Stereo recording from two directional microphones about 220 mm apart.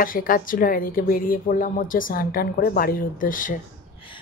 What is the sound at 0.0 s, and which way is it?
Speech, 40° left (ahead or behind).